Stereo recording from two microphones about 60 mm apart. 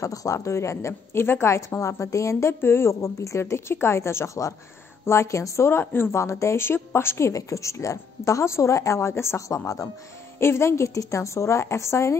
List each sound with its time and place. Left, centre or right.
0.0 s a woman's voice: left
2.6 s a woman's voice: left
5.7 s speech: left
6.2 s a woman's voice: left
6.6 s a woman's voice: left
9.5 s a woman's voice: left
10.4 s a woman's voice: left
11.0 s a woman's voice: left